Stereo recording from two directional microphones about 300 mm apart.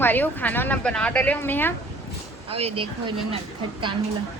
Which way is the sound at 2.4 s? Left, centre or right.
Centre.